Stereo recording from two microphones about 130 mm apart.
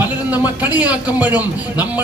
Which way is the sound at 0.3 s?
10° right (ahead or behind).